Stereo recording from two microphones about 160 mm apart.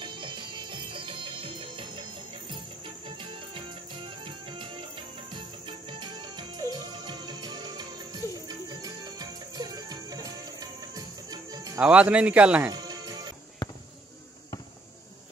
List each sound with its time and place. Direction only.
0.0 s music: 30° right (ahead or behind)
3.2 s music: 30° right (ahead or behind)
11.8 s speech: 10° right (ahead or behind)
12.7 s music: 25° right (ahead or behind)